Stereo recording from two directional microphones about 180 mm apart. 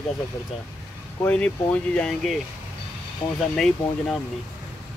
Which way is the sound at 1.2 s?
5° left (ahead or behind).